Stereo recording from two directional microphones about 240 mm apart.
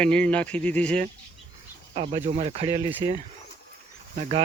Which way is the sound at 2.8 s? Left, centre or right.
Centre.